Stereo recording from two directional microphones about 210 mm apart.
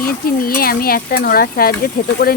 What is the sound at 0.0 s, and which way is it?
Speech, 45° left (ahead or behind).